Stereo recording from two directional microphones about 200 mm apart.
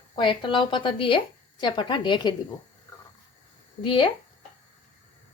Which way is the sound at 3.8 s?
25° left (ahead or behind).